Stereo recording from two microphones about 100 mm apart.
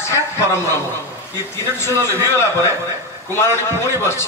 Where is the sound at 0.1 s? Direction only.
25° left (ahead or behind).